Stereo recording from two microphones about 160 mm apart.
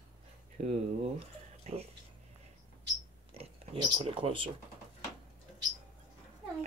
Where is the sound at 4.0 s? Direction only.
35° right (ahead or behind).